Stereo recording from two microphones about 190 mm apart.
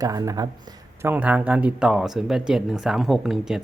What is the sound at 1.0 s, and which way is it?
Speech, 10° right (ahead or behind).